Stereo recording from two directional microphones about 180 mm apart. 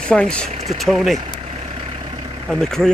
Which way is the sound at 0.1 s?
5° left (ahead or behind).